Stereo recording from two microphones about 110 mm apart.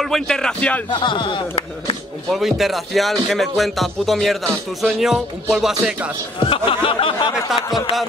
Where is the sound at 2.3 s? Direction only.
Centre (ahead or behind).